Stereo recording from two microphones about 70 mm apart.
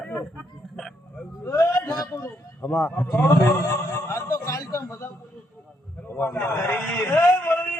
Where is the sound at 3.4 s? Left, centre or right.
Left.